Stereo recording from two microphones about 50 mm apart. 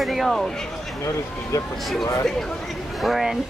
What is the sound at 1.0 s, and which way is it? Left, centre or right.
Speech, left.